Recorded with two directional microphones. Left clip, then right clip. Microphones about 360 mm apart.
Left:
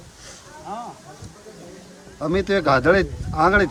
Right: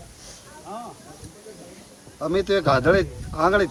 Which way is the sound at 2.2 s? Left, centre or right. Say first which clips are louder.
Left 1 dB; centre.